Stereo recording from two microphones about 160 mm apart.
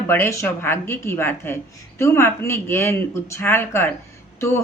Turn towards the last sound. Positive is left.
turn(degrees=15)  # may be behind; listen again after turning